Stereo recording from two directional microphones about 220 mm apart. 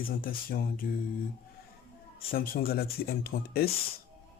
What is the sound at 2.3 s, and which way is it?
Speech, 40° left (ahead or behind).